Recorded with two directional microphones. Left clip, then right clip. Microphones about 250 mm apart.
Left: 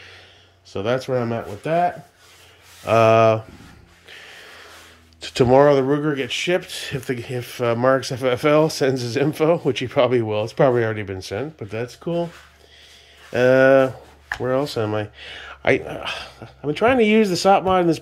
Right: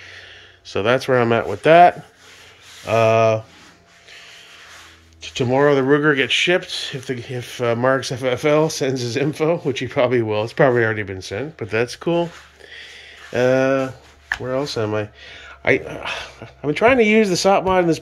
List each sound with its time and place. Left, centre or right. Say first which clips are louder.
0.7 s speech: right 5 dB; centre
2.8 s speech: left 1 dB; centre
5.2 s speech: left 5 dB; centre
5.6 s speech: right 4 dB; centre
13.3 s speech: left 3 dB; centre